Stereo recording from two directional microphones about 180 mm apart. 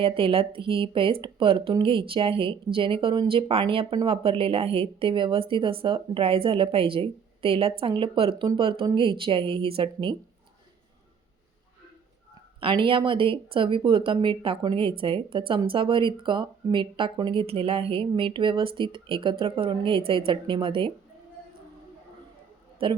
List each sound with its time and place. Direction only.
0.0 s speech: 30° right (ahead or behind)
12.5 s speech: 30° right (ahead or behind)
22.8 s speech: 30° right (ahead or behind)